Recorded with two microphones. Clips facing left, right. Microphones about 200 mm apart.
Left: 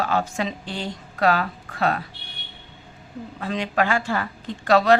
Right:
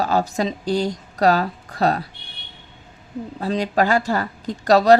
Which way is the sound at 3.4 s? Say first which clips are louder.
Right 4 dB; 35° right (ahead or behind).